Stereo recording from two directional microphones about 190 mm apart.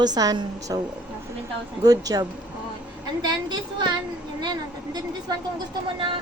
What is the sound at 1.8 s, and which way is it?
A woman's voice, 20° right (ahead or behind).